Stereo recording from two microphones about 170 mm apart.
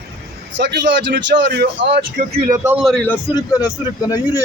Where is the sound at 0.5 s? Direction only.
90° right.